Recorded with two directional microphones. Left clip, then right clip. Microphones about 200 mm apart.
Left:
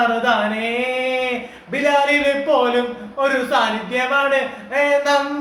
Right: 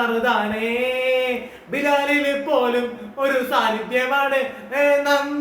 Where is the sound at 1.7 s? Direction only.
20° right (ahead or behind).